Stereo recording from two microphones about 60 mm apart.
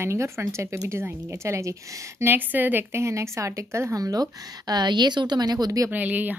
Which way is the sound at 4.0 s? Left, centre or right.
Right.